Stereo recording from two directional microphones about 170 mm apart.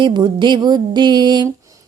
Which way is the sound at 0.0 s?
25° right (ahead or behind).